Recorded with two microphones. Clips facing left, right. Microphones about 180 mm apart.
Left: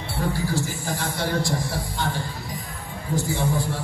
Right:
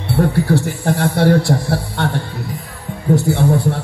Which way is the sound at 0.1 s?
60° right (ahead or behind).